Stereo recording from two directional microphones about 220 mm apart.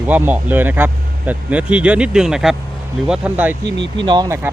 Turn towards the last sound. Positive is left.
turn(degrees=-15)  # may be behind; listen again after turning